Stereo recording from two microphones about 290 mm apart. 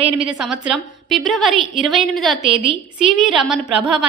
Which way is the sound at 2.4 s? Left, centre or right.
Centre.